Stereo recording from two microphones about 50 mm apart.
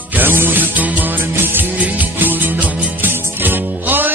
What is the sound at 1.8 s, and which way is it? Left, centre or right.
Music, right.